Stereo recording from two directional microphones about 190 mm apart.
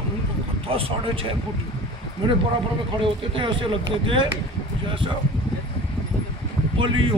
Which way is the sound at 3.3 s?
25° right (ahead or behind).